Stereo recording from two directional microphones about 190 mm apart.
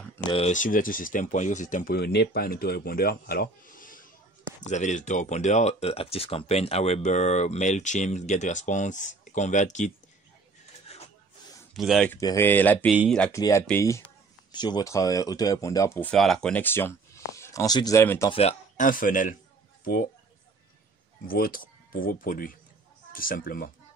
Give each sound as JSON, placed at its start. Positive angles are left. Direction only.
{"t": 0.3, "sound": "speech", "side_deg": 35}
{"t": 10.9, "sound": "a sound", "side_deg": 35}
{"t": 11.7, "sound": "speech", "side_deg": 0}
{"t": 12.1, "sound": "speech", "side_deg": 15}
{"t": 12.9, "sound": "speech", "side_deg": -5}
{"t": 13.2, "sound": "speech", "side_deg": 15}
{"t": 18.3, "sound": "speech", "side_deg": 35}
{"t": 21.3, "sound": "speech", "side_deg": 50}